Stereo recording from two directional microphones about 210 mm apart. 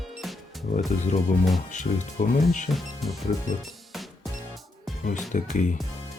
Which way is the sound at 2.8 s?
Centre (ahead or behind).